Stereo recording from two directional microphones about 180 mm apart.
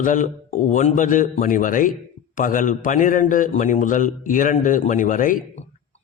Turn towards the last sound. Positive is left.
turn(degrees=45)  # may be behind; listen again after turning